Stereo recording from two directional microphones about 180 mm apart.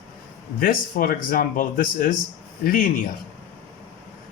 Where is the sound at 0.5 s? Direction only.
50° left (ahead or behind).